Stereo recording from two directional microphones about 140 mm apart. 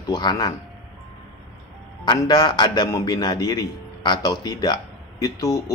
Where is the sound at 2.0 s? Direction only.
30° left (ahead or behind).